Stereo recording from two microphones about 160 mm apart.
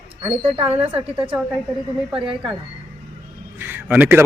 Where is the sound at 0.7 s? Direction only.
40° right (ahead or behind).